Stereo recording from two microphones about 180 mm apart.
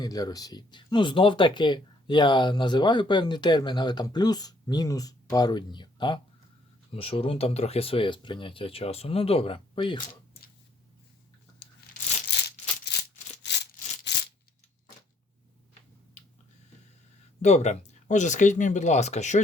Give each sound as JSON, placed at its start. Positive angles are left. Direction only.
{"t": 0.0, "sound": "speech", "side_deg": 20}
{"t": 12.3, "sound": "a sound", "side_deg": 70}
{"t": 17.4, "sound": "speech", "side_deg": 40}